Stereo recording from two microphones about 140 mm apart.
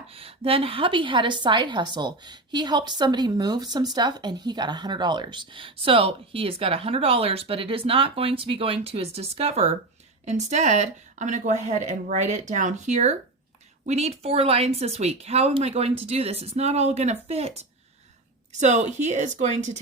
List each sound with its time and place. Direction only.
0.1 s a woman's voice: 40° right (ahead or behind)
18.6 s a woman's voice: 55° right (ahead or behind)